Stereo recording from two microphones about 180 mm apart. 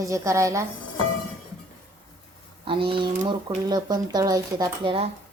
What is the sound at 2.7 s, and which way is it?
Speech, 30° right (ahead or behind).